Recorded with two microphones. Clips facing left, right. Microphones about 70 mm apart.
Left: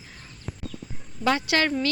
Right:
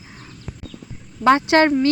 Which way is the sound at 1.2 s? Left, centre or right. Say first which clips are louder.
Right 9 dB; right.